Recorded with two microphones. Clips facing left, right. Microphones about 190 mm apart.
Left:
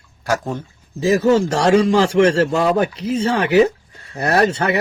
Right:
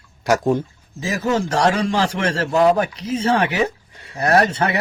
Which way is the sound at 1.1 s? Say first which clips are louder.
Left 2 dB; 30° left (ahead or behind).